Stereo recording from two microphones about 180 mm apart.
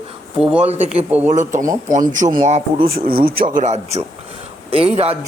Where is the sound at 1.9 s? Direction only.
45° right (ahead or behind).